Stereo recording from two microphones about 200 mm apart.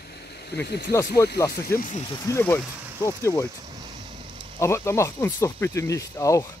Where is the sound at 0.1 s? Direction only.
55° left (ahead or behind).